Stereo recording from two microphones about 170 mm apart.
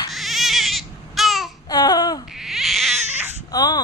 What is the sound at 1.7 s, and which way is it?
Baby cry, 20° left (ahead or behind).